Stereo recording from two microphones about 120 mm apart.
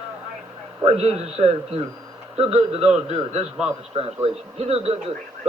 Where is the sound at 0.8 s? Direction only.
60° right (ahead or behind).